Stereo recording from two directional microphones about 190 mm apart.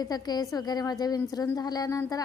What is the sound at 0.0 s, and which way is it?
A woman's voice, 20° left (ahead or behind).